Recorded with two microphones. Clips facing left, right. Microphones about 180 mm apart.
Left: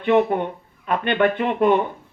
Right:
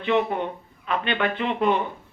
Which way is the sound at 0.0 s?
50° left (ahead or behind).